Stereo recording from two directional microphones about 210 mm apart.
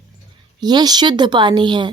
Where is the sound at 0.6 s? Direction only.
20° right (ahead or behind).